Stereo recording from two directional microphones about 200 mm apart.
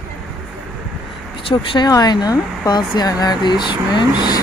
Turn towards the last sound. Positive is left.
turn(degrees=20)  # may be behind; listen again after turning